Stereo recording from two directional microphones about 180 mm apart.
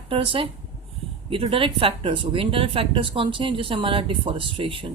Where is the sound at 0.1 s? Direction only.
30° right (ahead or behind).